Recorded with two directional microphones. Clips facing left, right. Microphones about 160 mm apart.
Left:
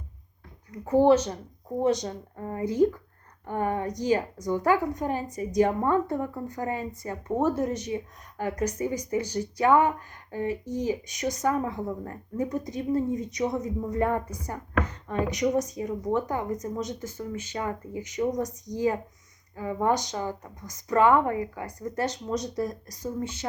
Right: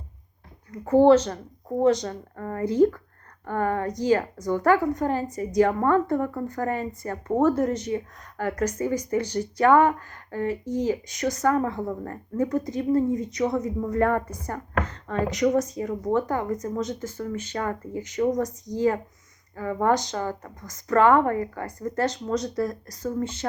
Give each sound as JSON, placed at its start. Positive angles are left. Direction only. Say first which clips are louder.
{"t": 1.0, "sound": "speech", "louder": "right 4 dB", "side_deg": 15}